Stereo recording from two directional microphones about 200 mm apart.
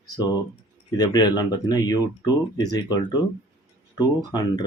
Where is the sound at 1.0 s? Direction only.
20° left (ahead or behind).